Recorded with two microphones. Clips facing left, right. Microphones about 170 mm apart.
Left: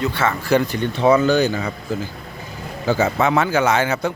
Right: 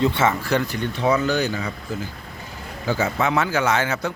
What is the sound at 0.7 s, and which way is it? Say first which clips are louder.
Speech: left 5 dB; 25° left (ahead or behind).